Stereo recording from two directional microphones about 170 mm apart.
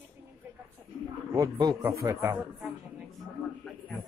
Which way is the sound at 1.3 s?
20° right (ahead or behind).